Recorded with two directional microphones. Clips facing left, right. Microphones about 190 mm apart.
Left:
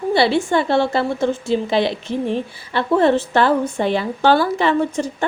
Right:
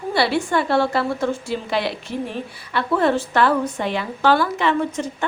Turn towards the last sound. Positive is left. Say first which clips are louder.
# left 3 dB
turn(degrees=35)  # may be behind; listen again after turning